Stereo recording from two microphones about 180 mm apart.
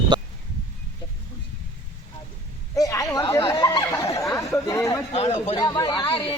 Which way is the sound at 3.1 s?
20° left (ahead or behind).